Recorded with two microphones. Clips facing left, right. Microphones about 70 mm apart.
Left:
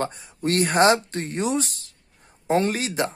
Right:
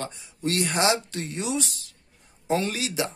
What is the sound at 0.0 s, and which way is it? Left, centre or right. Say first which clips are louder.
Speech: left 4 dB; left.